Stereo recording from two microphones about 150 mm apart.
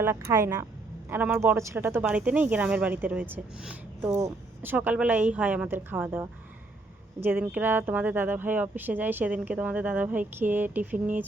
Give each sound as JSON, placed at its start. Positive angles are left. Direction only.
{"t": 0.0, "sound": "speech", "side_deg": -15}